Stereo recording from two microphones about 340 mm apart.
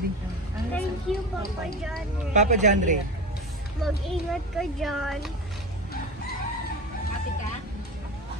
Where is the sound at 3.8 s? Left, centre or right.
Centre.